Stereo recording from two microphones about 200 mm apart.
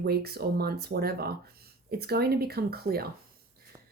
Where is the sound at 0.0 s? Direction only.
50° right (ahead or behind).